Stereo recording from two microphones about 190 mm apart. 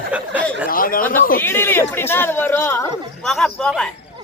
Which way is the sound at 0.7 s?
50° left (ahead or behind).